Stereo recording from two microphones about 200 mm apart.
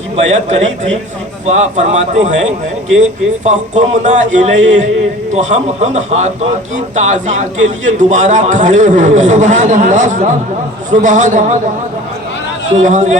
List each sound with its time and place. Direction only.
0.3 s a man's voice: 35° right (ahead or behind)
3.4 s a man's voice: 35° right (ahead or behind)
12.8 s a man's voice: 35° right (ahead or behind)